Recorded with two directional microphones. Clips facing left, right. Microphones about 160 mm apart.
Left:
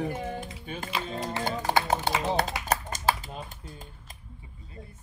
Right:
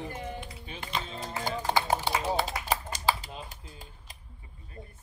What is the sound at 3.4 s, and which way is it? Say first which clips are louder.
Speech: left 3 dB; 45° left (ahead or behind).